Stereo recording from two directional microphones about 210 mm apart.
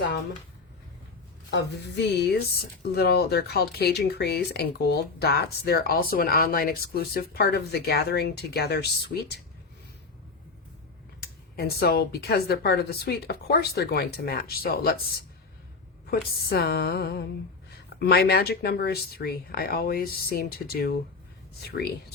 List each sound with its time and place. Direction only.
1.5 s speech: 55° left (ahead or behind)
11.2 s speech: 50° left (ahead or behind)